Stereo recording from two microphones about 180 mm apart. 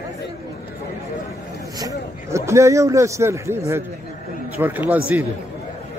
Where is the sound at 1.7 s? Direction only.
20° right (ahead or behind).